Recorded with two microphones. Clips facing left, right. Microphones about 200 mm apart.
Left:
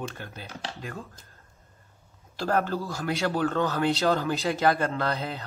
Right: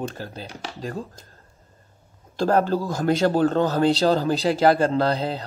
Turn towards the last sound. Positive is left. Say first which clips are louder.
# right 7 dB
turn(degrees=-30)  # may be behind; listen again after turning